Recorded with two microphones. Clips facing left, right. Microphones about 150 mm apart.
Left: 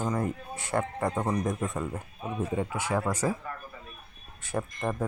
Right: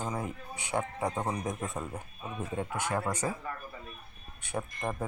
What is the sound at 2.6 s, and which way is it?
Speech, 5° left (ahead or behind).